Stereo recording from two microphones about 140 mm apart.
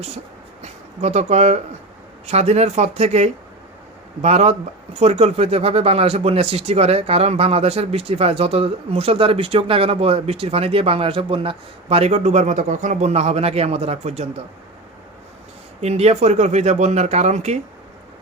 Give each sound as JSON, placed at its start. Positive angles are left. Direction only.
{"t": 0.6, "sound": "speech", "side_deg": -55}
{"t": 15.8, "sound": "speech", "side_deg": -50}